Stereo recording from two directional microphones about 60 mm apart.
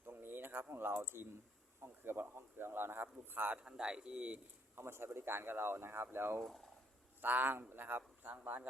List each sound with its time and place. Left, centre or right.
0.0 s a sound: right
0.7 s speech: right
3.6 s speech: centre
4.7 s speech: right